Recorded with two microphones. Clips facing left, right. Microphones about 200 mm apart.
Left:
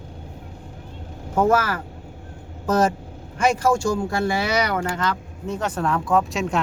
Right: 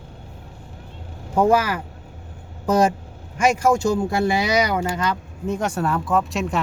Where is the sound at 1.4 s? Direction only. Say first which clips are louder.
Right 1 dB; 15° right (ahead or behind).